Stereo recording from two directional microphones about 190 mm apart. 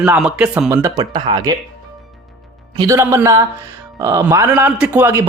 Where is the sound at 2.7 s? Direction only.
20° right (ahead or behind).